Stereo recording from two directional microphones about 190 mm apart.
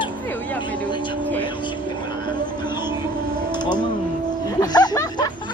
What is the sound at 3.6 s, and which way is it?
Speech, 25° left (ahead or behind).